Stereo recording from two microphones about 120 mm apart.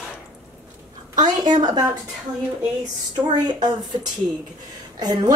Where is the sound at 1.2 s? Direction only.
35° right (ahead or behind).